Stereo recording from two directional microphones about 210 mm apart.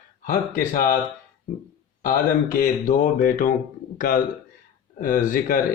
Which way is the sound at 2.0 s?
40° left (ahead or behind).